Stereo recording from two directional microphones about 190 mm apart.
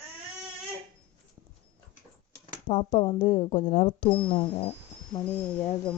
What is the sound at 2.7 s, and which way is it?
Speech, 30° left (ahead or behind).